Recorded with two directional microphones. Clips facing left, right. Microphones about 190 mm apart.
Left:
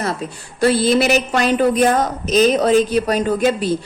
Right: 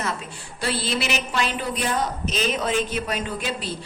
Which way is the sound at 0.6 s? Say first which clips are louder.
Left 12 dB; 45° left (ahead or behind).